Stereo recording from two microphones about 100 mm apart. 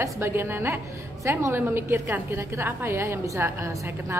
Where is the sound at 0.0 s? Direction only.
25° right (ahead or behind).